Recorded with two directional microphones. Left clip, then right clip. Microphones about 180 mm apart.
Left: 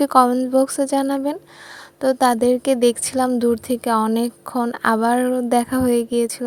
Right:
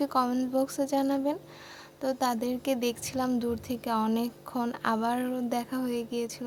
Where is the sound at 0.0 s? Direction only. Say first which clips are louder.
Left 13 dB; 45° left (ahead or behind).